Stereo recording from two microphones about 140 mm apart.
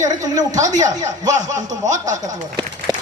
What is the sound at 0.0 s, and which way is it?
Speech, 25° right (ahead or behind).